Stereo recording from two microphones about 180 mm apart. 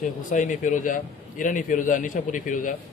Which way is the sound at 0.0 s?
45° left (ahead or behind).